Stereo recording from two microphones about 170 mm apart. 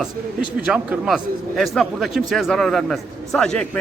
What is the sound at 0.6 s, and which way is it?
A man's voice, 5° right (ahead or behind).